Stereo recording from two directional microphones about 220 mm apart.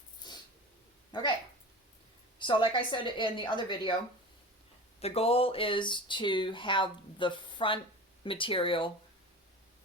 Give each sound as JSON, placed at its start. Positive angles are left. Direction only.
{"t": 0.2, "sound": "a sound", "side_deg": 20}
{"t": 2.4, "sound": "speech", "side_deg": 20}
{"t": 4.9, "sound": "speech", "side_deg": 25}